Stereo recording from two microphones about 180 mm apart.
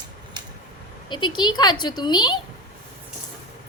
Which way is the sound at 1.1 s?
25° left (ahead or behind).